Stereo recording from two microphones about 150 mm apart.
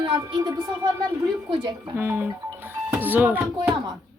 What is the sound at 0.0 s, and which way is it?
A woman's voice, 35° right (ahead or behind).